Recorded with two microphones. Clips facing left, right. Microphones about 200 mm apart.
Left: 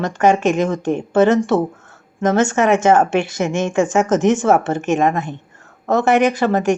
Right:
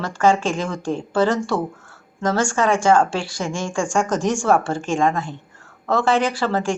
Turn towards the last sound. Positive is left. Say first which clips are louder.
# left 6 dB
turn(degrees=20)  # may be behind; listen again after turning